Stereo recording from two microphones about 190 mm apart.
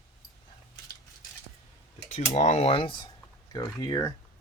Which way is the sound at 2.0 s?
35° left (ahead or behind).